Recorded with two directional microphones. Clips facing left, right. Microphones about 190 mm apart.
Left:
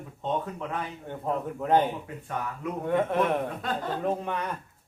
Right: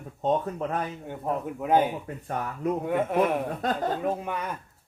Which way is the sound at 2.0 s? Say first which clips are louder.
Right 2 dB; 40° right (ahead or behind).